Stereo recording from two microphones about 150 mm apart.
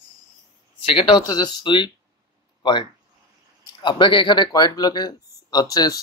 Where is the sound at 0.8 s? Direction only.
35° left (ahead or behind).